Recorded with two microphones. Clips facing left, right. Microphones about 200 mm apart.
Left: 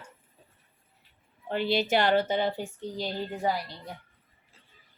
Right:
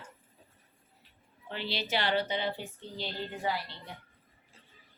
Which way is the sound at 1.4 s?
50° left (ahead or behind).